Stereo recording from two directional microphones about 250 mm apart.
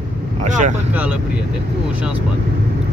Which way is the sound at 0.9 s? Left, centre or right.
Centre.